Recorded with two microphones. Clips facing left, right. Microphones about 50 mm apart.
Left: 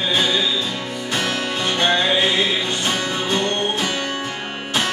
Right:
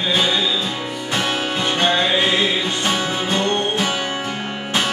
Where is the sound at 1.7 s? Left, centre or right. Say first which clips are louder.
Even; centre.